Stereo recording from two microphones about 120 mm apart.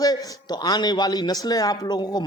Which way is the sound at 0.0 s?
35° left (ahead or behind).